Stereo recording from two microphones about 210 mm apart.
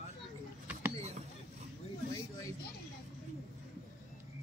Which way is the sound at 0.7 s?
10° right (ahead or behind).